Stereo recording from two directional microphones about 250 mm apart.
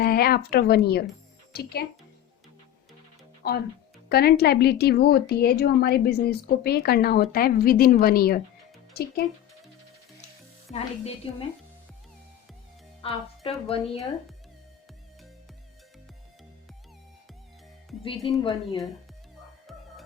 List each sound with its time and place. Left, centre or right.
0.0 s a woman's voice: left
4.1 s a woman's voice: left
10.7 s speech: left
13.0 s a woman's voice: left
18.3 s speech: left